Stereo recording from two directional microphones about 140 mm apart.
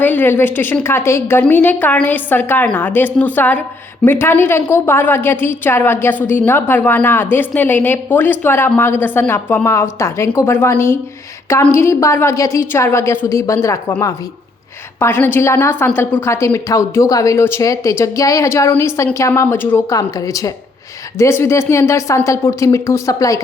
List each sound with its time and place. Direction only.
0.0 s a woman's voice: 15° left (ahead or behind)
14.9 s a woman's voice: 15° left (ahead or behind)